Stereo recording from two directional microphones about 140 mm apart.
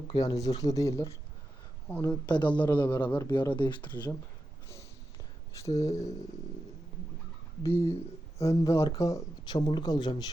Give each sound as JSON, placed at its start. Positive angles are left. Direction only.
{"t": 0.1, "sound": "speech", "side_deg": 30}
{"t": 1.9, "sound": "a woman's voice", "side_deg": 10}
{"t": 2.2, "sound": "speech", "side_deg": 30}
{"t": 2.6, "sound": "a woman's voice", "side_deg": 15}
{"t": 3.2, "sound": "speech", "side_deg": 25}
{"t": 5.5, "sound": "speech", "side_deg": 20}
{"t": 7.6, "sound": "speech", "side_deg": 40}
{"t": 8.4, "sound": "speech", "side_deg": 20}